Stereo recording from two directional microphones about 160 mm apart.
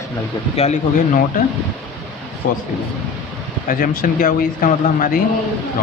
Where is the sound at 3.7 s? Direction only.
65° left (ahead or behind).